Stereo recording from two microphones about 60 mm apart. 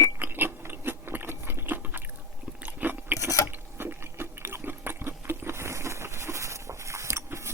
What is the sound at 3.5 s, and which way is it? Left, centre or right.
Water, right.